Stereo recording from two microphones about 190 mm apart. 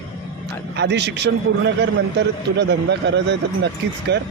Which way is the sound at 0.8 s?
65° right (ahead or behind).